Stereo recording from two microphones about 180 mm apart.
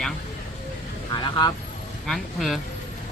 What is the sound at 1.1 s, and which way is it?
Speech, 25° left (ahead or behind).